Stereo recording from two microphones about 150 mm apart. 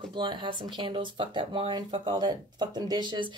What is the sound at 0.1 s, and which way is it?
Speech, 30° right (ahead or behind).